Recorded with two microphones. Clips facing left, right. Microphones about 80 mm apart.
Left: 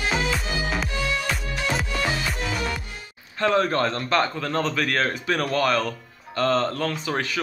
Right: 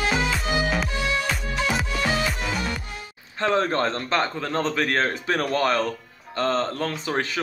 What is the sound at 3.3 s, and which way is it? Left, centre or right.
Speech, right.